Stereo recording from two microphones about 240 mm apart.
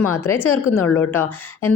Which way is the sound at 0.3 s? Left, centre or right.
Centre.